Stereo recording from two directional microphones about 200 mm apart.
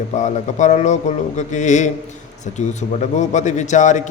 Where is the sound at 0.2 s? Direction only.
35° left (ahead or behind).